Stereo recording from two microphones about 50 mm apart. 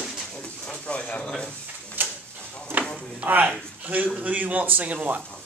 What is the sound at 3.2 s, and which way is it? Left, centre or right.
Speech, right.